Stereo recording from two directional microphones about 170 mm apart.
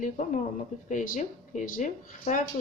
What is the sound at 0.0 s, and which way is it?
Speech, 45° left (ahead or behind).